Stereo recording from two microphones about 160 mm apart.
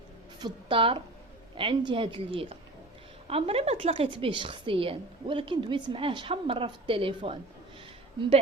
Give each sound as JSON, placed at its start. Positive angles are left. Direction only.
{"t": 0.3, "sound": "speech", "side_deg": -30}